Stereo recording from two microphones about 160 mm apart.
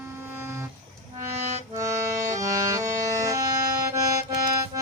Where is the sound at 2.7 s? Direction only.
20° right (ahead or behind).